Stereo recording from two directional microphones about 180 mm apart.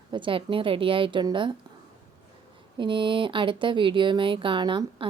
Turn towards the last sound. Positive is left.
turn(degrees=-25)  # may be behind; listen again after turning